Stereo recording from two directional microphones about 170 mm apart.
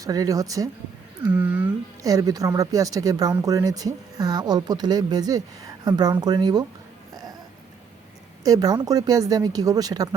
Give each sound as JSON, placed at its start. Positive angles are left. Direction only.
{"t": 0.0, "sound": "speech", "side_deg": -20}
{"t": 1.3, "sound": "speech", "side_deg": -10}
{"t": 2.0, "sound": "speech", "side_deg": -20}
{"t": 8.4, "sound": "speech", "side_deg": -20}